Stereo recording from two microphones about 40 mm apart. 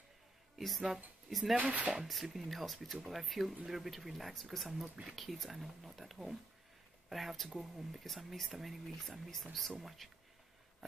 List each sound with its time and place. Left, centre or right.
0.6 s speech: centre
1.6 s speech: right
2.2 s speech: centre